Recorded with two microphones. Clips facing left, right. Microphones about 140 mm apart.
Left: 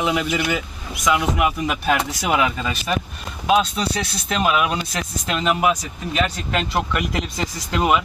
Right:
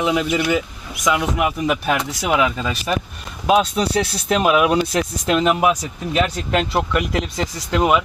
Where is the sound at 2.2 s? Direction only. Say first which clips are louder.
Right 2 dB; 15° left (ahead or behind).